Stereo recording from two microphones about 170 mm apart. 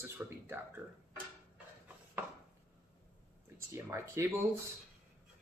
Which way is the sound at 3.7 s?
15° right (ahead or behind).